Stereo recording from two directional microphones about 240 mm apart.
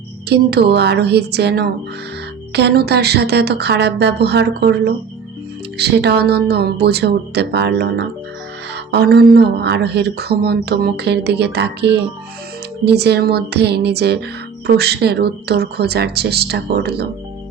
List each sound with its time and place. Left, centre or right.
0.3 s speech: right